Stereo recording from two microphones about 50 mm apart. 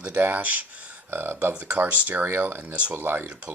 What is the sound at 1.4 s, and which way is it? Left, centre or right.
Speech, right.